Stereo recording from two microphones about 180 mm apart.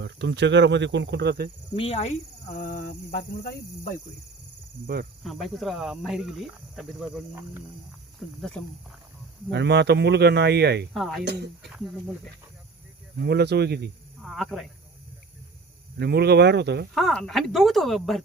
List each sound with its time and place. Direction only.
0.0 s speech: 75° right (ahead or behind)
1.7 s speech: 30° left (ahead or behind); by 4.0 s 50° left (ahead or behind)
5.2 s speech: centre (ahead or behind)
8.4 s speech: 5° left (ahead or behind)
9.5 s speech: 70° right (ahead or behind)
10.9 s speech: centre (ahead or behind)
11.3 s speech: 70° right (ahead or behind)
13.2 s speech: 65° right (ahead or behind)
14.2 s speech: centre (ahead or behind)
16.0 s speech: 65° right (ahead or behind)
16.9 s speech: centre (ahead or behind)